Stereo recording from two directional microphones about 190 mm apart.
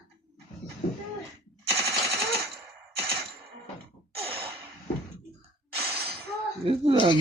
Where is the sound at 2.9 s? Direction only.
30° right (ahead or behind).